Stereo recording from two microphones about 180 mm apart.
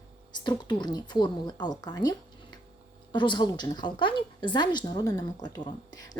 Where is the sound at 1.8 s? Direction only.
20° left (ahead or behind).